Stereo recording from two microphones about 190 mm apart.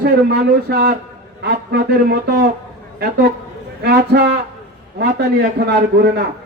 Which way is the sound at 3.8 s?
60° right (ahead or behind).